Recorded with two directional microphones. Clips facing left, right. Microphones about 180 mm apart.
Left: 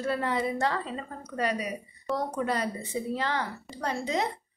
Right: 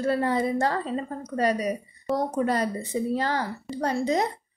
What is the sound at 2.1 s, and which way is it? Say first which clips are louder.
Speech: right 4 dB; 5° right (ahead or behind).